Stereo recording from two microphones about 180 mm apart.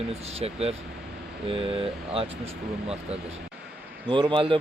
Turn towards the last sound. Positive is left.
turn(degrees=-30)  # may be behind; listen again after turning